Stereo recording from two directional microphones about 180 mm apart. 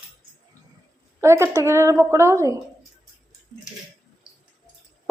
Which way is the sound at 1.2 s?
15° right (ahead or behind).